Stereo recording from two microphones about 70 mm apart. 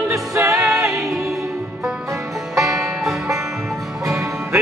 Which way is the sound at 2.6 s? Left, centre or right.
Centre.